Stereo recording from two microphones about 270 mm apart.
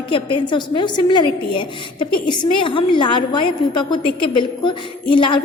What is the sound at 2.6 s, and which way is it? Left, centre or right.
A woman's voice, centre.